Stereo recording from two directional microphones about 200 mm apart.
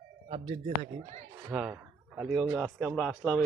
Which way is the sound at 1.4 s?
5° right (ahead or behind).